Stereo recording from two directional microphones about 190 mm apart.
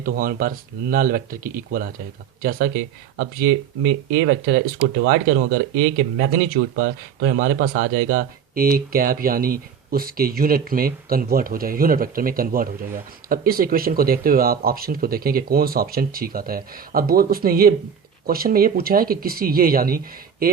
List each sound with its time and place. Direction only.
0.0 s speech: 50° right (ahead or behind)